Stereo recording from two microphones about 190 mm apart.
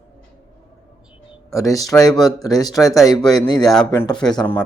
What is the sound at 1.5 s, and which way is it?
Speech, 15° left (ahead or behind).